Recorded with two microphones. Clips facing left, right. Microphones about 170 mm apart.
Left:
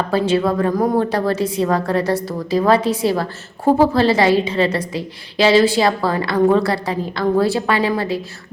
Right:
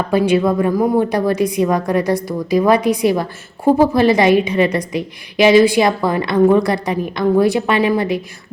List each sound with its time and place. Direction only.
0.1 s a woman's voice: 15° right (ahead or behind)